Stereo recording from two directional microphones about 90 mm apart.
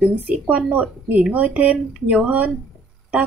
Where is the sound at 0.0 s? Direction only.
15° right (ahead or behind).